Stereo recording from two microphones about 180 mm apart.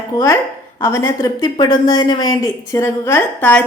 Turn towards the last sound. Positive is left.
turn(degrees=10)  # may be behind; listen again after turning